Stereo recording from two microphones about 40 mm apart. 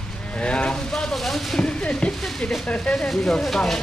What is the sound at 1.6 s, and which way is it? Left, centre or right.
Speech, left.